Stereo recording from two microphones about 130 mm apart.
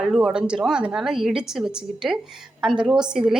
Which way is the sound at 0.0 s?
Centre (ahead or behind).